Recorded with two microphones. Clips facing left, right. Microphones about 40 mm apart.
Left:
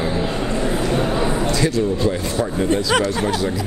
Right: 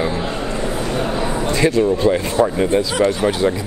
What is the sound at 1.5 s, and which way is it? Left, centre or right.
A man's voice, right.